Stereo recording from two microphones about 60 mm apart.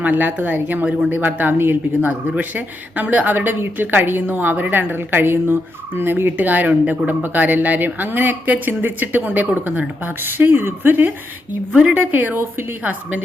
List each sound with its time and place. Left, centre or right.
0.0 s a woman's voice: right
12.8 s a woman's voice: right